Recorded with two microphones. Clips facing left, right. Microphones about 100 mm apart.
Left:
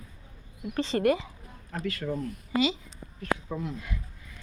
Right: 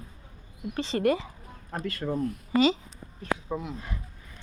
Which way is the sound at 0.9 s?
35° left (ahead or behind).